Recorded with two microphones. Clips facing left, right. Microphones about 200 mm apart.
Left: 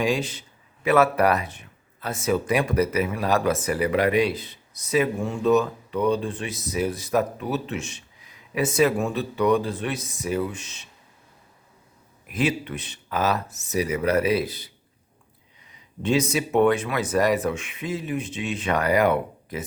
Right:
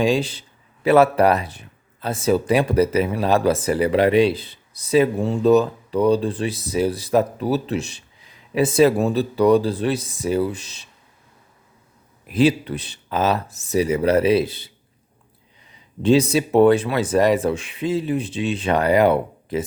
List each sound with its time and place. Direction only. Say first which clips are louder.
0.0 s speech: right 5 dB; 30° right (ahead or behind)
12.2 s speech: right 7 dB; 30° right (ahead or behind)
15.7 s speech: right 7 dB; 30° right (ahead or behind)